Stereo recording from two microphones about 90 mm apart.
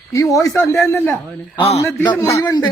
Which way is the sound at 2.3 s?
45° left (ahead or behind).